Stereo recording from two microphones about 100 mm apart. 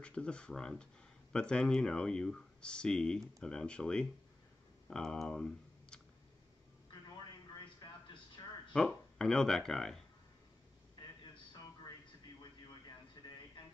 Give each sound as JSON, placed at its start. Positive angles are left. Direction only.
{"t": 0.0, "sound": "speech", "side_deg": 10}
{"t": 8.4, "sound": "a sound", "side_deg": 45}
{"t": 8.7, "sound": "speech", "side_deg": 5}